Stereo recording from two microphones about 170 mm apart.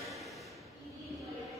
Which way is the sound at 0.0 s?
Centre (ahead or behind).